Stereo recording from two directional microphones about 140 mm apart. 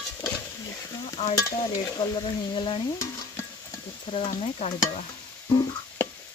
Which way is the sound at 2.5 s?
35° left (ahead or behind).